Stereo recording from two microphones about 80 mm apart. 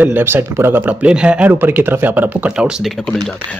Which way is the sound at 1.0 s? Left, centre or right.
Centre.